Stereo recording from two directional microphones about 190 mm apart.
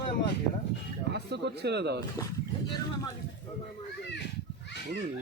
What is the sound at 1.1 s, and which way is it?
Speech, 60° right (ahead or behind).